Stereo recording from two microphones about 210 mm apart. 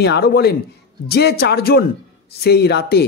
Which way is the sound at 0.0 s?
50° left (ahead or behind).